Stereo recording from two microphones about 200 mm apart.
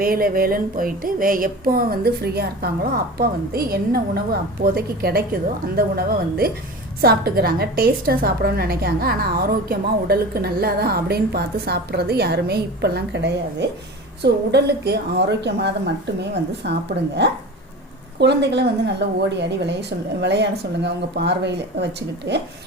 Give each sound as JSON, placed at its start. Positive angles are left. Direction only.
{"t": 0.0, "sound": "a woman's voice", "side_deg": -45}